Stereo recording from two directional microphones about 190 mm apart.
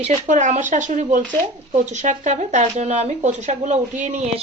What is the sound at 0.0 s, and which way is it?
Speech, 40° right (ahead or behind).